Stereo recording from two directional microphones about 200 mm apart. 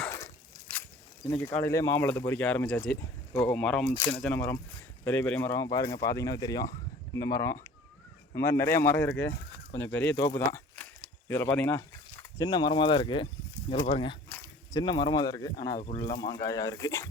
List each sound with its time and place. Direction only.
0.0 s dog: 15° left (ahead or behind)
1.3 s speech: 10° left (ahead or behind)
14.3 s speech: 10° left (ahead or behind)
15.8 s speech: 30° left (ahead or behind)
16.0 s speech: 20° left (ahead or behind)